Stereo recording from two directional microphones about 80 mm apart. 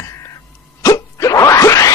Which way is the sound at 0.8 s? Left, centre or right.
Left.